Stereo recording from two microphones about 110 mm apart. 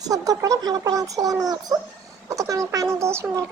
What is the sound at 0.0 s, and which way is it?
Speech, 35° right (ahead or behind).